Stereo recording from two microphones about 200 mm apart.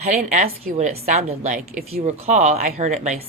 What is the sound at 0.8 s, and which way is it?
A woman's voice, 35° right (ahead or behind).